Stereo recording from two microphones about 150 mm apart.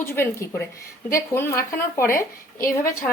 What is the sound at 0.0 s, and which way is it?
Speech, 15° left (ahead or behind).